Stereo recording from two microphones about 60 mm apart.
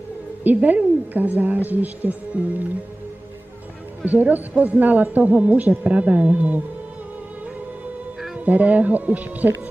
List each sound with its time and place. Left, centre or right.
0.4 s a woman's voice: right
4.0 s a woman's voice: right
8.5 s a woman's voice: right